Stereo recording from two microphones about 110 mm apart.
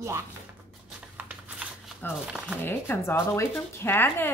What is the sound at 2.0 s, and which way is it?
A woman's voice, 20° left (ahead or behind).